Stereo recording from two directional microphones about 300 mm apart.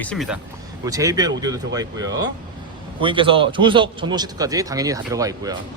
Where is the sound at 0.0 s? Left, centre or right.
Centre.